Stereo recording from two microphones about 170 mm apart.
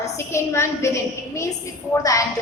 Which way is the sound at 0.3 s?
15° left (ahead or behind).